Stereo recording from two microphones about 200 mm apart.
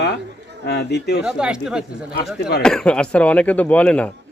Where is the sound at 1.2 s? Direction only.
5° right (ahead or behind).